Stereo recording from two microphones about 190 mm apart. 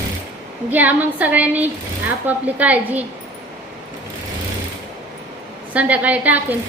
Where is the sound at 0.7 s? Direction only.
10° right (ahead or behind).